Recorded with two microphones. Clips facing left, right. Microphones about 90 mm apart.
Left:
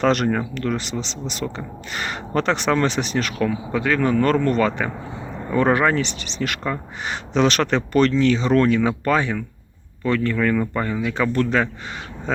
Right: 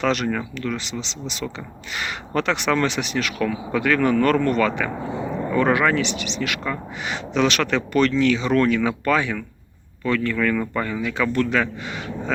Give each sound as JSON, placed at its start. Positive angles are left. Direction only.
{"t": 0.0, "sound": "speech", "side_deg": 40}